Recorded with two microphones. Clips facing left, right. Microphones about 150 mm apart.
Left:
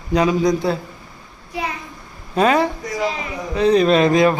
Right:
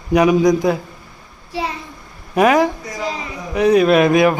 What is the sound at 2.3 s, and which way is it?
Speech, 15° right (ahead or behind).